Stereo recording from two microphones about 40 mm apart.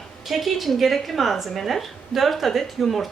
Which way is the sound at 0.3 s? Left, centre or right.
Centre.